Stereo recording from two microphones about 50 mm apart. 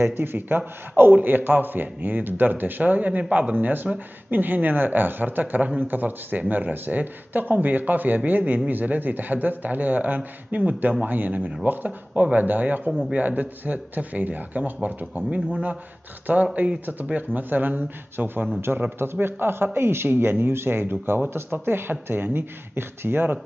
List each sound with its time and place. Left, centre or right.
0.0 s a man's voice: right
16.5 s a man's voice: right